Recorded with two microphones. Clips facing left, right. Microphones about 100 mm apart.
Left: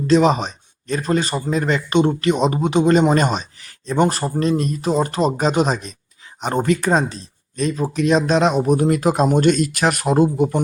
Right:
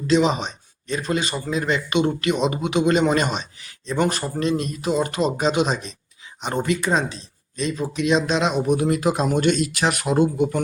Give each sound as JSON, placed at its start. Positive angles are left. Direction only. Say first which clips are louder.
{"t": 0.1, "sound": "a man's voice", "louder": "left 4 dB", "side_deg": 40}